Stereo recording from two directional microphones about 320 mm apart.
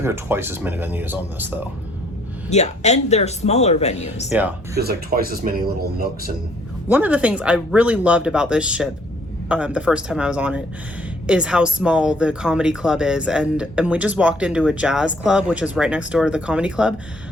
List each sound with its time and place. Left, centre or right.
0.0 s speech: centre
2.5 s speech: left
4.3 s speech: centre
4.8 s speech: right
6.8 s speech: centre